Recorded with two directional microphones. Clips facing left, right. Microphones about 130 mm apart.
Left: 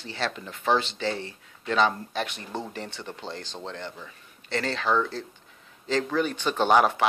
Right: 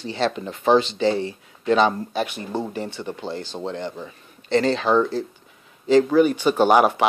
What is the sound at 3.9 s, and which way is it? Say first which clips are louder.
Speech: right 8 dB; 25° right (ahead or behind).